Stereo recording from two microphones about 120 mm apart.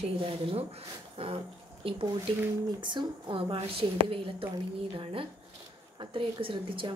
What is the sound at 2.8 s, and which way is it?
A woman's voice, 40° right (ahead or behind).